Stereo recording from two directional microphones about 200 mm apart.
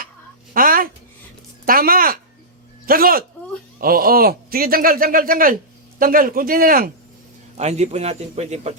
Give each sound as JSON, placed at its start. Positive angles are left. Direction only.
{"t": 0.5, "sound": "a sound", "side_deg": -45}
{"t": 1.6, "sound": "speech", "side_deg": -45}
{"t": 7.5, "sound": "a man's voice", "side_deg": -35}